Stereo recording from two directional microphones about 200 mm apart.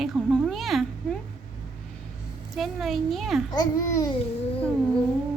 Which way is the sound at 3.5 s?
15° left (ahead or behind).